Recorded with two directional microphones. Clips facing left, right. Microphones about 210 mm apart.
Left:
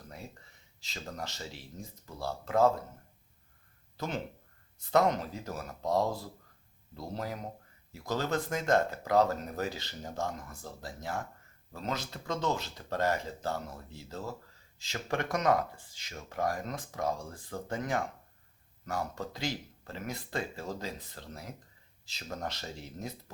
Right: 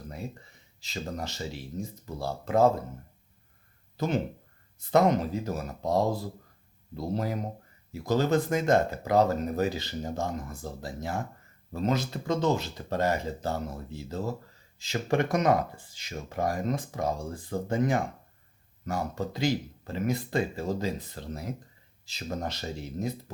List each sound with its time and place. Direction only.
0.9 s speech: 15° right (ahead or behind)
2.0 s speech: 20° right (ahead or behind)
3.9 s speech: 15° right (ahead or behind)
13.7 s speech: 25° right (ahead or behind)
14.8 s speech: 10° right (ahead or behind)